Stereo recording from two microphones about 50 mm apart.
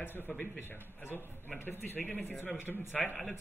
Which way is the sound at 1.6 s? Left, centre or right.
Left.